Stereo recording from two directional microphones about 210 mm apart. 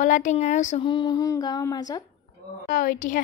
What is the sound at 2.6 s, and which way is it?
Speech, 40° left (ahead or behind).